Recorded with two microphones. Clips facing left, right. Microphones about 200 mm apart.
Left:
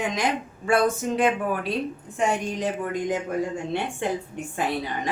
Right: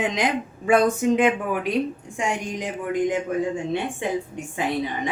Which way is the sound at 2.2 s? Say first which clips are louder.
Left 2 dB; 15° right (ahead or behind).